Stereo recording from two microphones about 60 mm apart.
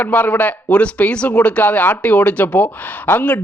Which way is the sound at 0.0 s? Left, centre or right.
Left.